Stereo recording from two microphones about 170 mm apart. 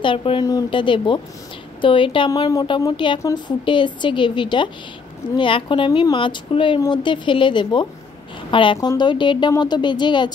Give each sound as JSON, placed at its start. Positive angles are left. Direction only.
{"t": 0.0, "sound": "speech", "side_deg": 30}